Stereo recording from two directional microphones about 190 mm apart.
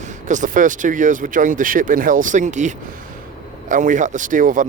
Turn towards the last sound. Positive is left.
turn(degrees=-45)  # may be behind; listen again after turning